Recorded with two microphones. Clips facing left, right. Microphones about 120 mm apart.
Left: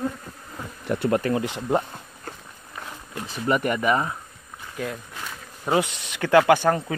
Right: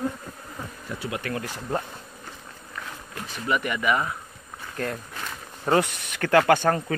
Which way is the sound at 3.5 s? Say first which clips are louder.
Left 3 dB; 40° left (ahead or behind).